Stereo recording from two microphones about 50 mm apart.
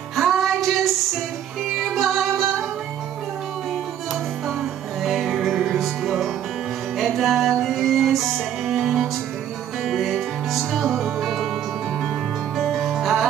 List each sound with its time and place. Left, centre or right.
0.1 s music: centre
1.9 s music: centre
5.0 s music: centre
12.7 s music: centre